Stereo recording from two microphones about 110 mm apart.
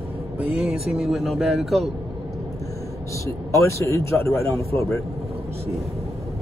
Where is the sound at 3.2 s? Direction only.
25° left (ahead or behind).